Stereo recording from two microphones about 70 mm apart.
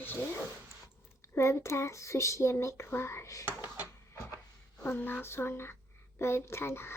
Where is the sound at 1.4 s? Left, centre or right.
Left.